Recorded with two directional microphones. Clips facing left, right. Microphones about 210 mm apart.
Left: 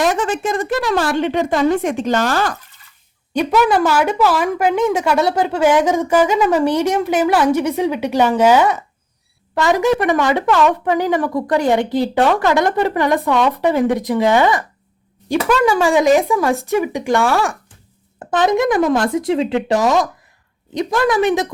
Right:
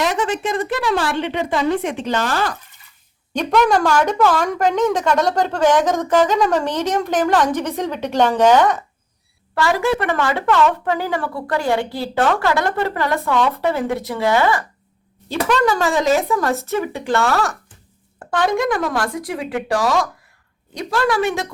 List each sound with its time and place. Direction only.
0.0 s a woman's voice: 45° left (ahead or behind)
3.3 s a woman's voice: 5° left (ahead or behind)
9.6 s a woman's voice: 20° left (ahead or behind)
15.3 s a woman's voice: 10° left (ahead or behind)